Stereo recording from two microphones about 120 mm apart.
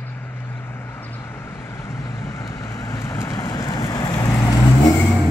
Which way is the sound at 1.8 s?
25° left (ahead or behind).